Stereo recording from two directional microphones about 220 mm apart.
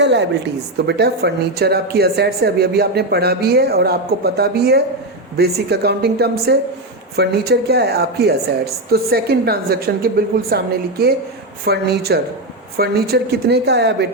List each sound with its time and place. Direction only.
0.0 s a woman's voice: 50° right (ahead or behind)